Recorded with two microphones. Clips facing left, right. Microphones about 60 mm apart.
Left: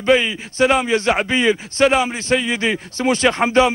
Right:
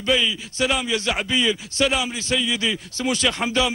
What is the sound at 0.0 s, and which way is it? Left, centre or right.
A man's voice, left.